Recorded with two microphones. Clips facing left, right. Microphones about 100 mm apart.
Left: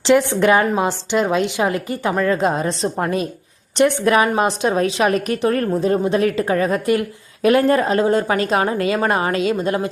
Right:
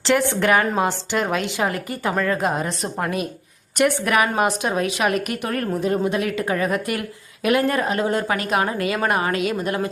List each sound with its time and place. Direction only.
0.0 s a woman's voice: 20° left (ahead or behind)